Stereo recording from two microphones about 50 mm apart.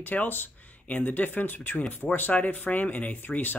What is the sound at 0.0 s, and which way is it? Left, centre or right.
Speech, left.